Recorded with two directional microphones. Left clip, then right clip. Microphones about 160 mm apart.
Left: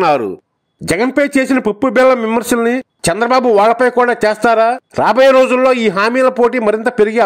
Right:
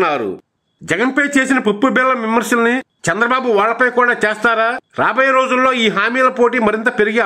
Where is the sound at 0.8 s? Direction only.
35° left (ahead or behind).